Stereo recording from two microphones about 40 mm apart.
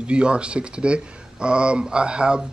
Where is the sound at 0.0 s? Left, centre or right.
Right.